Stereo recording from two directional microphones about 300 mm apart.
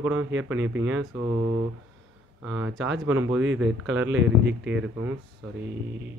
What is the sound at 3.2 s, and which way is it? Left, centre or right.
Speech, right.